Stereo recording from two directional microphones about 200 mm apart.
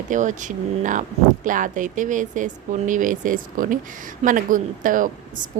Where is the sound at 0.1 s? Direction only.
40° right (ahead or behind).